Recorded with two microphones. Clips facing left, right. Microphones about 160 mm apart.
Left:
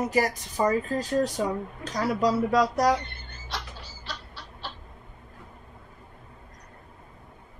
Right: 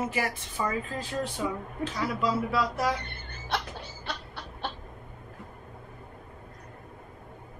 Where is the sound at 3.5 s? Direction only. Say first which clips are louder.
Right 5 dB; 55° right (ahead or behind).